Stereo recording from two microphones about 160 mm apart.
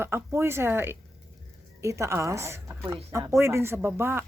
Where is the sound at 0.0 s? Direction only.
15° right (ahead or behind).